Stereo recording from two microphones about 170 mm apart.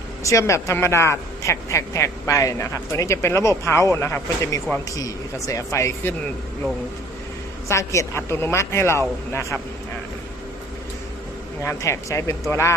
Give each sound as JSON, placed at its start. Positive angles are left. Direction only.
{"t": 0.3, "sound": "speech", "side_deg": 15}
{"t": 7.7, "sound": "speech", "side_deg": 15}
{"t": 11.6, "sound": "speech", "side_deg": 15}